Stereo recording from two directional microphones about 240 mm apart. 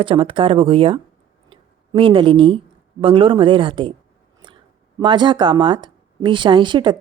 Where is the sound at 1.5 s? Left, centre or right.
Right.